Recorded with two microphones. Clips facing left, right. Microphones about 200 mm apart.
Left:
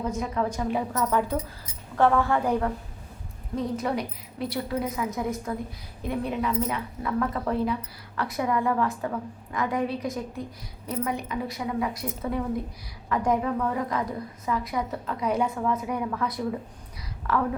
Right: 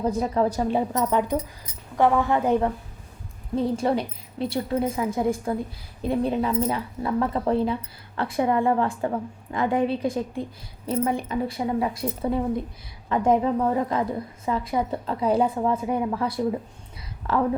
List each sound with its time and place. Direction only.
0.0 s a woman's voice: 35° right (ahead or behind)
0.9 s a woman's voice: 20° right (ahead or behind)